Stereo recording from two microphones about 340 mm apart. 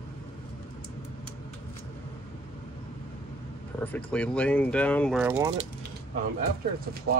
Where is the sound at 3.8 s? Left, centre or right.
Centre.